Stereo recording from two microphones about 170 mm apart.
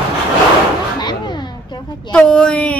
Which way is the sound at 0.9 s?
25° left (ahead or behind).